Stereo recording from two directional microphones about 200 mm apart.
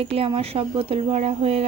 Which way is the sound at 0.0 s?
30° right (ahead or behind).